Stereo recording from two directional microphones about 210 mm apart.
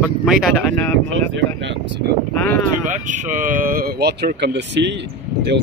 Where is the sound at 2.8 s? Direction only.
35° right (ahead or behind).